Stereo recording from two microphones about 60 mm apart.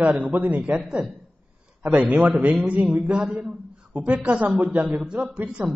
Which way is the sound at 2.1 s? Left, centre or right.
Right.